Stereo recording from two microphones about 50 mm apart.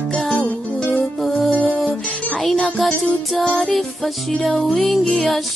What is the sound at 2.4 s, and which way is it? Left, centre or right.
Music, centre.